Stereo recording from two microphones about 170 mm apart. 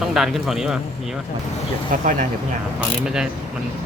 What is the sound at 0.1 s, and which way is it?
Speech, centre (ahead or behind).